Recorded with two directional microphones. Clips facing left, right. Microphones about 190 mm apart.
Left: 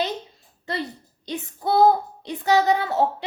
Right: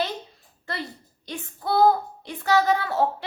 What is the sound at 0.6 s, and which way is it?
A woman's voice, 20° left (ahead or behind).